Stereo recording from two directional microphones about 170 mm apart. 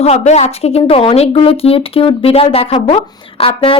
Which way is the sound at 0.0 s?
40° left (ahead or behind).